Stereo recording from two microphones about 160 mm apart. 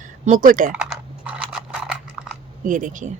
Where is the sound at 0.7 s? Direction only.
5° right (ahead or behind).